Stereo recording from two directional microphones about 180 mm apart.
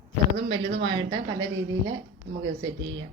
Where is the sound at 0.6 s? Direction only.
75° right (ahead or behind).